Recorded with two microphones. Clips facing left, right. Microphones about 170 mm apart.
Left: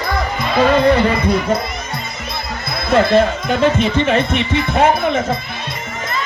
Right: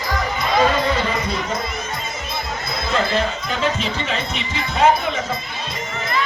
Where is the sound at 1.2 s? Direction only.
60° left (ahead or behind).